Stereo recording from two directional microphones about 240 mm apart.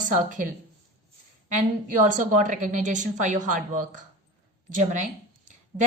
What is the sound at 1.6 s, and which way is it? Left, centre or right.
A woman's voice, right.